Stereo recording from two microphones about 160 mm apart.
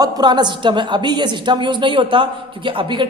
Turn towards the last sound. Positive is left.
turn(degrees=-30)  # may be behind; listen again after turning